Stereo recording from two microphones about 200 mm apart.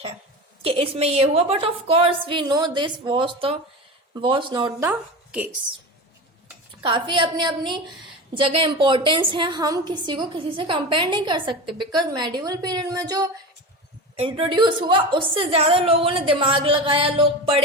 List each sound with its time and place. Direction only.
0.6 s a woman's voice: 30° right (ahead or behind)
4.9 s a woman's voice: 5° right (ahead or behind)
6.8 s a woman's voice: 25° right (ahead or behind)